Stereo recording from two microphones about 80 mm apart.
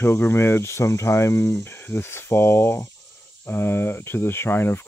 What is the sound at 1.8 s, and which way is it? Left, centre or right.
Speech, left.